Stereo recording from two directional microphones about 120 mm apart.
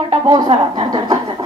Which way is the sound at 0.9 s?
40° right (ahead or behind).